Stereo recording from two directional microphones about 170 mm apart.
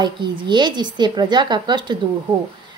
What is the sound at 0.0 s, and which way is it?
A woman's voice, 25° right (ahead or behind).